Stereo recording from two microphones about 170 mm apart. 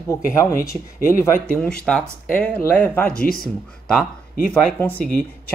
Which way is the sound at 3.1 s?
60° left (ahead or behind).